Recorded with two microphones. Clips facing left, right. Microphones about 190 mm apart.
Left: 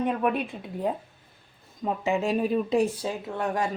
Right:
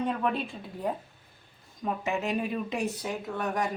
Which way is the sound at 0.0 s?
15° left (ahead or behind).